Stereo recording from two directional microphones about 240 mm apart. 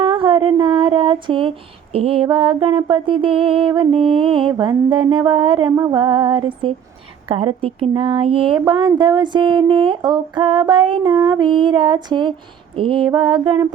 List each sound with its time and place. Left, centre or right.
0.0 s speech: right
5.7 s female singing: centre
6.0 s speech: right